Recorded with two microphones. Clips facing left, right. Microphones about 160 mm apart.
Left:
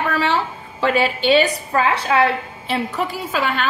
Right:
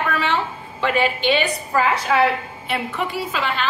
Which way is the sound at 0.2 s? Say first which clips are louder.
Left 2 dB; 35° left (ahead or behind).